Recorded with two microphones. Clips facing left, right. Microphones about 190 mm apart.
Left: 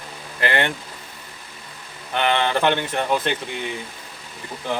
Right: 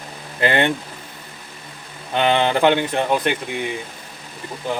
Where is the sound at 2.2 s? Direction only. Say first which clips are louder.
Right 3 dB; 15° right (ahead or behind).